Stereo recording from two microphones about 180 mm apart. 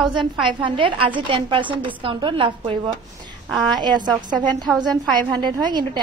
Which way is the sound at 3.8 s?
25° right (ahead or behind).